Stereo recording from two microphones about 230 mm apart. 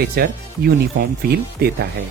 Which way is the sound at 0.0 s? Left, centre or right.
Right.